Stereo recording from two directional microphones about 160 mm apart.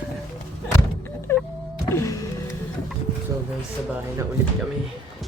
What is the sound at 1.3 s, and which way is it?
Music, 15° left (ahead or behind).